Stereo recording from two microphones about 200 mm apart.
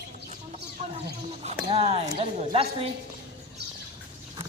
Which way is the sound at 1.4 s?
30° right (ahead or behind).